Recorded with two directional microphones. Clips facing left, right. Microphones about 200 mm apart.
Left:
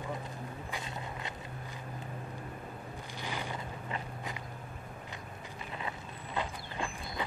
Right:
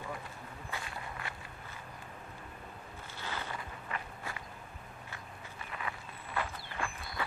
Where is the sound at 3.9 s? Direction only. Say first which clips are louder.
Left 1 dB; 20° left (ahead or behind).